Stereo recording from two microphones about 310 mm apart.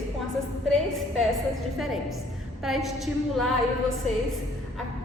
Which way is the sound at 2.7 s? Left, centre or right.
Centre.